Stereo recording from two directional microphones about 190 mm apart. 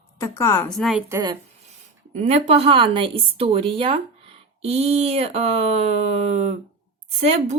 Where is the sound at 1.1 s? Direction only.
20° right (ahead or behind).